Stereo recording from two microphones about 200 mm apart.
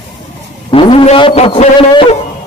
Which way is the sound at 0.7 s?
25° left (ahead or behind).